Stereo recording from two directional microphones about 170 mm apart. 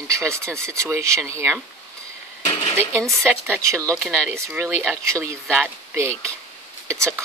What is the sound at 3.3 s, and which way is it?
Speech, 15° right (ahead or behind).